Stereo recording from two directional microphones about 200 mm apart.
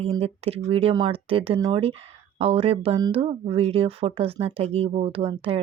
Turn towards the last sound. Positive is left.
turn(degrees=-30)  # may be behind; listen again after turning